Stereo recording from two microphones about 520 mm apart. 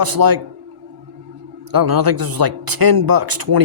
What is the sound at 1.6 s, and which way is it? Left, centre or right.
Speech, right.